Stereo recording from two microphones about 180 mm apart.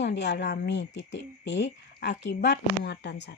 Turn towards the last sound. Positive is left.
turn(degrees=65)  # may be behind; listen again after turning